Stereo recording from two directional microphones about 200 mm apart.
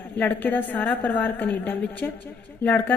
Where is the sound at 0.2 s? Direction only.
10° left (ahead or behind).